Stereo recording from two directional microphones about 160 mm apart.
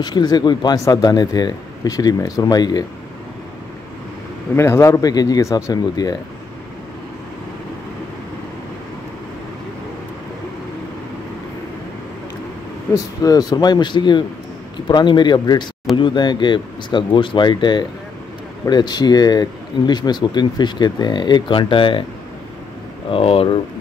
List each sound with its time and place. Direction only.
0.0 s speech: 25° left (ahead or behind)
4.6 s speech: 20° left (ahead or behind)
12.9 s speech: 25° left (ahead or behind)
23.1 s speech: 35° left (ahead or behind)